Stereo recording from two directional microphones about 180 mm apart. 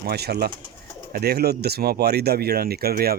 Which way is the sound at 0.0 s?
60° right (ahead or behind).